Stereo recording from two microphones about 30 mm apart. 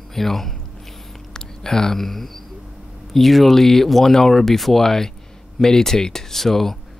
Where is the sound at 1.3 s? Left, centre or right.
Centre.